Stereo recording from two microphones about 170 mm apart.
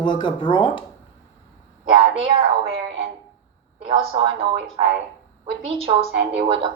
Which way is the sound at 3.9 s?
30° right (ahead or behind).